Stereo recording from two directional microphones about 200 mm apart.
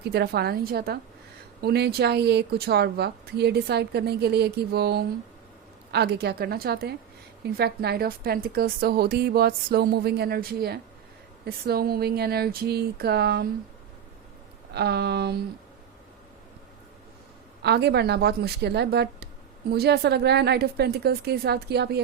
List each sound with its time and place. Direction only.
0.0 s a woman's voice: 55° right (ahead or behind)
14.7 s a woman's voice: 55° right (ahead or behind)
17.6 s a woman's voice: 55° right (ahead or behind)